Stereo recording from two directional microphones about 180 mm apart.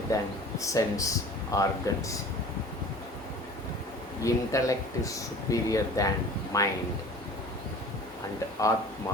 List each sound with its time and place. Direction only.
0.1 s speech: 20° left (ahead or behind)
4.2 s speech: 20° left (ahead or behind)